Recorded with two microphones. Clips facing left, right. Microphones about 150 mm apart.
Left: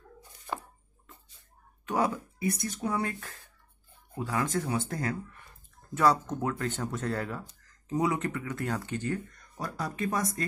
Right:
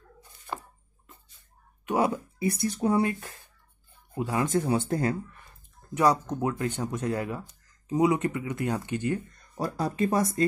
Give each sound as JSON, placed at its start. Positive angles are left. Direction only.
{"t": 1.9, "sound": "speech", "side_deg": -15}
{"t": 2.1, "sound": "speech", "side_deg": -30}
{"t": 3.1, "sound": "speech", "side_deg": -15}
{"t": 4.5, "sound": "speech", "side_deg": -30}
{"t": 5.9, "sound": "speech", "side_deg": -15}
{"t": 9.3, "sound": "speech", "side_deg": -30}